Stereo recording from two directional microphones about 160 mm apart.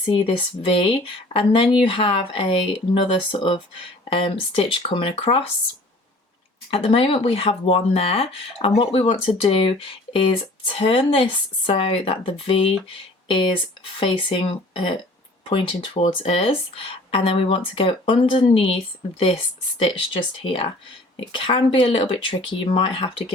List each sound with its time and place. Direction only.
0.1 s speech: 30° left (ahead or behind)
6.7 s speech: 35° left (ahead or behind)
19.8 s speech: 35° left (ahead or behind)